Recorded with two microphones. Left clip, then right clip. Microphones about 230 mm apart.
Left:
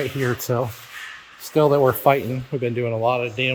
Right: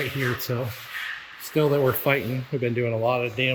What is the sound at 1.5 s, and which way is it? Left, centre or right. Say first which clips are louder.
Speech: left 5 dB; centre.